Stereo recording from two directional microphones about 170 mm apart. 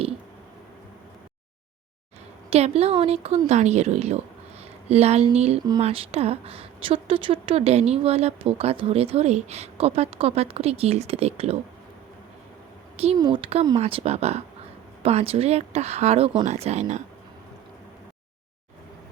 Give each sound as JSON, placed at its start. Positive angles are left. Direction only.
{"t": 2.5, "sound": "a woman's voice", "side_deg": -40}
{"t": 13.1, "sound": "a woman's voice", "side_deg": -25}